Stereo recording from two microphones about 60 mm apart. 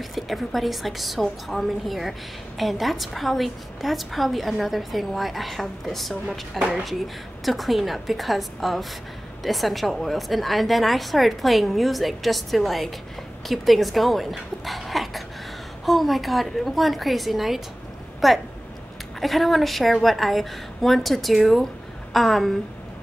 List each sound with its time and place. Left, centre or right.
0.1 s a woman's voice: centre
14.6 s dog: centre
15.8 s a woman's voice: centre